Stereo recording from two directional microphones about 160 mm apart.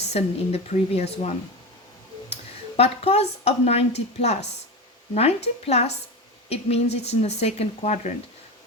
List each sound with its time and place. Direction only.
0.0 s speech: 40° left (ahead or behind)
2.3 s speech: 40° left (ahead or behind)